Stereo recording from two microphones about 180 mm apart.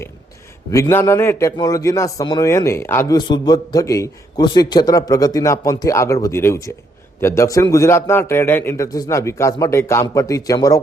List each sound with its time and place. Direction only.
0.7 s a man's voice: 15° left (ahead or behind)